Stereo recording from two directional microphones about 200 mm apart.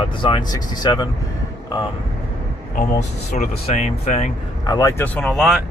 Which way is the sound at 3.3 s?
35° left (ahead or behind).